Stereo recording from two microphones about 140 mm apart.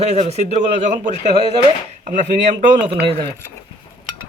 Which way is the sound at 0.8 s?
60° right (ahead or behind).